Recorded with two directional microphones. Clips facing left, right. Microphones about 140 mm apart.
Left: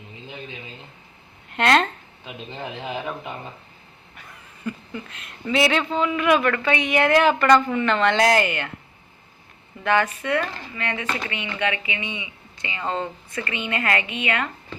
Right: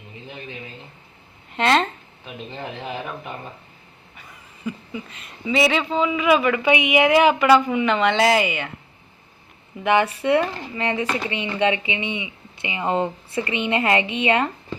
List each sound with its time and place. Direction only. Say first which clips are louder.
1.5 s speech: even; centre (ahead or behind)
4.1 s speech: even; 5° right (ahead or behind)
6.6 s a woman's voice: right 3 dB; 15° right (ahead or behind)
9.8 s speech: right 2 dB; 20° right (ahead or behind)
10.8 s speech: right 5 dB; 30° right (ahead or behind)
11.0 s speech: right 4 dB; 10° right (ahead or behind)
11.3 s speech: right 6 dB; 30° right (ahead or behind)